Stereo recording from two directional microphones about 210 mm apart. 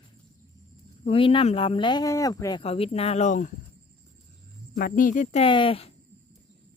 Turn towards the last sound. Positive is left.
turn(degrees=25)  # may be behind; listen again after turning